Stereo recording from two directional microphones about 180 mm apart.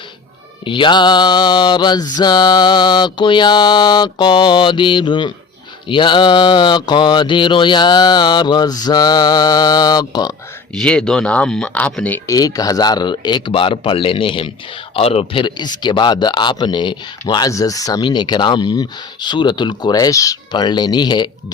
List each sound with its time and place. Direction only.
0.6 s speech: 25° left (ahead or behind)
10.8 s speech: 5° left (ahead or behind); by 21.2 s 25° left (ahead or behind)